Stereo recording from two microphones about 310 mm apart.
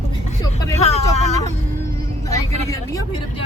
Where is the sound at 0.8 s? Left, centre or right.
Left.